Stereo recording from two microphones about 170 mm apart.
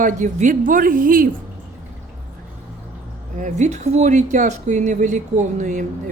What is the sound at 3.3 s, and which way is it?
Speech, 45° right (ahead or behind).